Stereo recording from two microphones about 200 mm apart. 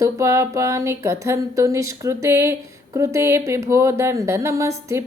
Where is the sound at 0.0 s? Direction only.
15° right (ahead or behind).